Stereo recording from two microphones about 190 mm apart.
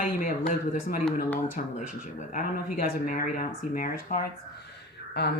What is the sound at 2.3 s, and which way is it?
Speech, 50° left (ahead or behind).